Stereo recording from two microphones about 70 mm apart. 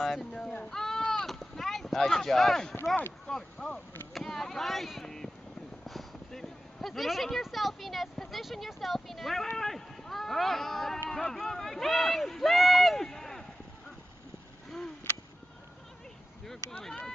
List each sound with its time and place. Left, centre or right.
0.2 s speech: centre
3.6 s arrow: left
4.1 s speech: centre
16.8 s speech: centre